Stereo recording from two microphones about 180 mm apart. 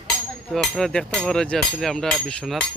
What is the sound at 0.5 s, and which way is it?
Speech, centre (ahead or behind).